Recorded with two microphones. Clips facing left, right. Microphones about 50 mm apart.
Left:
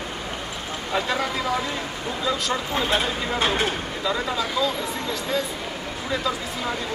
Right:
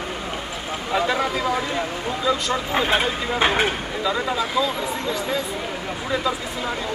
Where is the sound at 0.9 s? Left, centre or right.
Centre.